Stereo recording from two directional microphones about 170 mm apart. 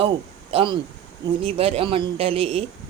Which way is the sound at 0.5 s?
30° right (ahead or behind).